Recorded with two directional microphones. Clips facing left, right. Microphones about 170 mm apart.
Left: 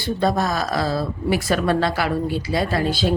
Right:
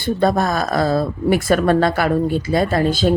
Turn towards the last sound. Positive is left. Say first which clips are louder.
# right 4 dB
turn(degrees=-45)  # may be behind; listen again after turning